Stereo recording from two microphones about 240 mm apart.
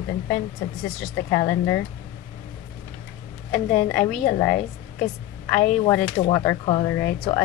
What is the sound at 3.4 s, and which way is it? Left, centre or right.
Speech, centre.